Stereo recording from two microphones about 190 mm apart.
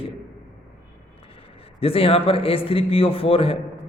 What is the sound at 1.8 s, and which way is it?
A man's voice, 30° left (ahead or behind).